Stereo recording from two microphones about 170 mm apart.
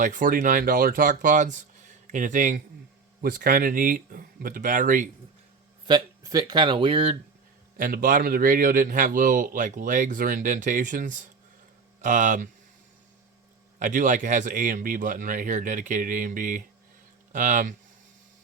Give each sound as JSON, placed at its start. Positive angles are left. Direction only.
{"t": 0.0, "sound": "a man's voice", "side_deg": -50}
{"t": 5.9, "sound": "speech", "side_deg": -25}
{"t": 7.8, "sound": "a man's voice", "side_deg": -55}
{"t": 13.7, "sound": "a man's voice", "side_deg": -50}